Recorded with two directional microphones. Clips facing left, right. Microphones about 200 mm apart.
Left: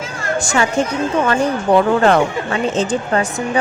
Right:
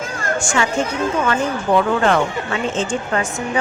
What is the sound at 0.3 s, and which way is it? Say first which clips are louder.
Speech: left 3 dB; 40° left (ahead or behind).